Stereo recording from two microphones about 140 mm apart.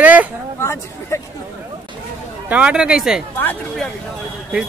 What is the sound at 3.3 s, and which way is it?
Speech, 15° left (ahead or behind).